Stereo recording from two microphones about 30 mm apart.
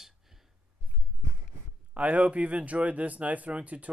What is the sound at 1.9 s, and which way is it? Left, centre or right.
Speech, right.